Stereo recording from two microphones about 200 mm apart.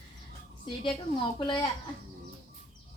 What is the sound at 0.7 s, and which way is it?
A woman's voice, 25° left (ahead or behind).